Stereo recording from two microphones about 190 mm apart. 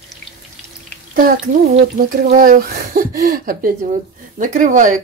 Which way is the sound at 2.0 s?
45° right (ahead or behind).